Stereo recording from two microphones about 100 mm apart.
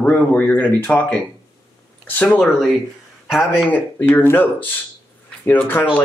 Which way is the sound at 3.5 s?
20° left (ahead or behind).